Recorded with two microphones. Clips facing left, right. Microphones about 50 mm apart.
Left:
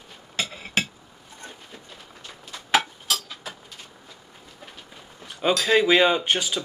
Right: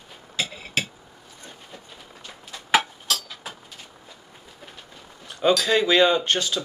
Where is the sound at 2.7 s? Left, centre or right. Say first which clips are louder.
Right 1 dB; centre.